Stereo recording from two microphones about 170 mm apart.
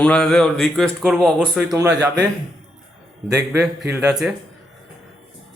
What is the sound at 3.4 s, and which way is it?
Speech, 75° right (ahead or behind).